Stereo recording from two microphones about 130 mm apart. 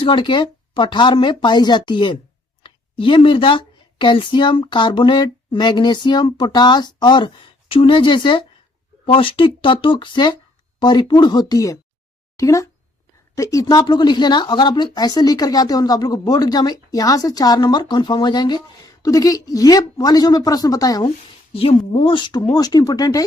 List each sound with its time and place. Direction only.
0.0 s speech: 40° left (ahead or behind)
21.5 s speech: 45° left (ahead or behind); by 23.2 s 30° left (ahead or behind)